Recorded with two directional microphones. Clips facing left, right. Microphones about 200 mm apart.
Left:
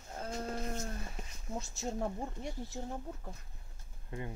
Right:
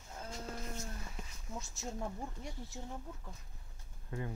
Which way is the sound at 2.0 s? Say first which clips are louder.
Left 5 dB; 35° left (ahead or behind).